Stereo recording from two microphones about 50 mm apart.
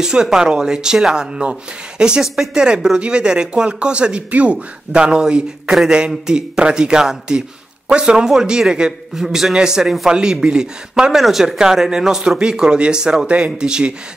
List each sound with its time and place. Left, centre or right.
0.0 s speech: centre
5.7 s speech: centre
5.9 s speech: centre